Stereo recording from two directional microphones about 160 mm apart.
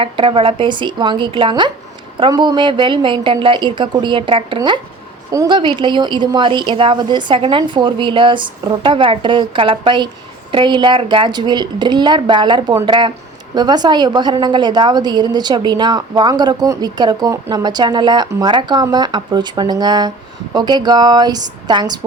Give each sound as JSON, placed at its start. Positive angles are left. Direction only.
{"t": 0.0, "sound": "a woman's voice", "side_deg": -35}